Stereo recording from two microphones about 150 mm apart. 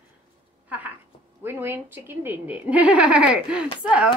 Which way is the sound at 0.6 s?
10° right (ahead or behind).